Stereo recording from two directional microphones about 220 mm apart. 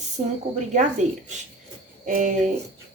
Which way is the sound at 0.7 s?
35° right (ahead or behind).